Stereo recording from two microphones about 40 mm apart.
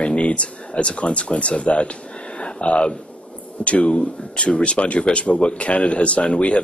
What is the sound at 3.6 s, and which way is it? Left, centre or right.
A man's voice, left.